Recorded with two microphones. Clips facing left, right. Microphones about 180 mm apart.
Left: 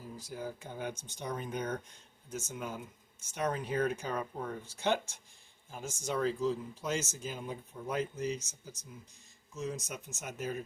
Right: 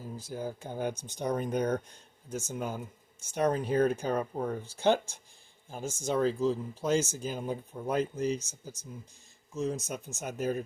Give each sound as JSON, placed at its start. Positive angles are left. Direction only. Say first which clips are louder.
{"t": 0.2, "sound": "speech", "louder": "right 4 dB", "side_deg": -30}